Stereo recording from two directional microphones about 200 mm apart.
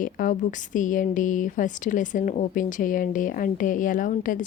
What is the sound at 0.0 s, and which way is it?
Speech, 40° left (ahead or behind).